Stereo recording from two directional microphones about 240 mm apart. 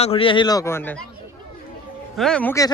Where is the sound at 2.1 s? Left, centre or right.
Centre.